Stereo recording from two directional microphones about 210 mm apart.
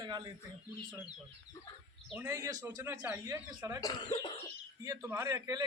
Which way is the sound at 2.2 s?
15° right (ahead or behind).